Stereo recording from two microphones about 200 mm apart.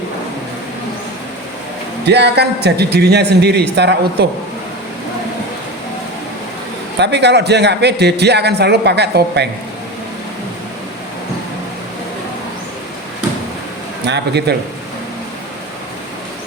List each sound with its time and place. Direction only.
2.0 s a man's voice: 55° right (ahead or behind)
7.0 s a man's voice: 60° right (ahead or behind)
14.0 s a man's voice: 55° right (ahead or behind)